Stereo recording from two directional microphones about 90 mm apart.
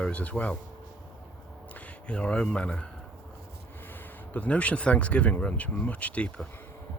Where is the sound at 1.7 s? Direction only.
15° left (ahead or behind).